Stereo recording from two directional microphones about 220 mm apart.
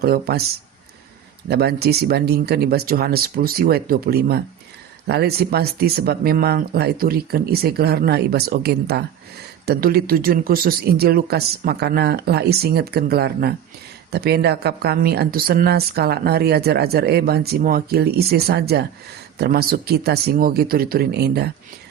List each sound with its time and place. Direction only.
0.0 s a woman's voice: 45° right (ahead or behind)
1.5 s a woman's voice: 45° right (ahead or behind)